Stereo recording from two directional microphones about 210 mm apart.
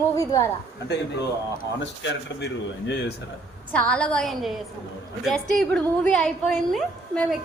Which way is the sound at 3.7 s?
5° left (ahead or behind).